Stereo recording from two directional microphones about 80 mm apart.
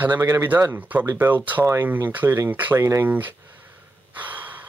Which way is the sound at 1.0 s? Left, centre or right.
Right.